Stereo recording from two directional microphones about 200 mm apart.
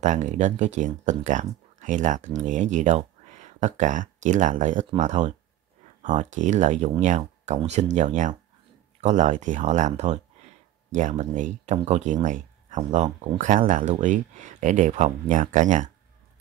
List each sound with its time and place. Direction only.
0.0 s speech: 35° right (ahead or behind)